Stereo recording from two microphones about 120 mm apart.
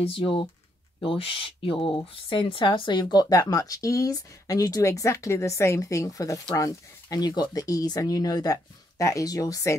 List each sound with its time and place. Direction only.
1.0 s speech: 50° left (ahead or behind); by 9.8 s 25° left (ahead or behind)